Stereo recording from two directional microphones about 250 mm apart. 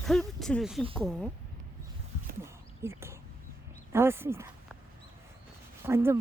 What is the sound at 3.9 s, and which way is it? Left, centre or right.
Speech, centre.